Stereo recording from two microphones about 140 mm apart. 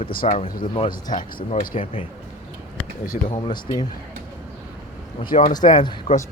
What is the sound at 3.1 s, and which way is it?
Speech, 60° left (ahead or behind).